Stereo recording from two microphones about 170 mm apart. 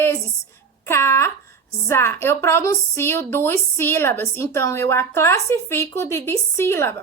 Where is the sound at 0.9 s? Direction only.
15° left (ahead or behind).